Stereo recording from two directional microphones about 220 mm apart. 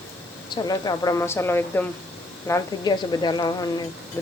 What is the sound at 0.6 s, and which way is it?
A woman's voice, 15° left (ahead or behind).